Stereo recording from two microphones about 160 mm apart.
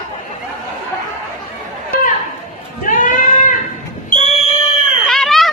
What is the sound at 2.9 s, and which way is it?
Goat, 55° left (ahead or behind).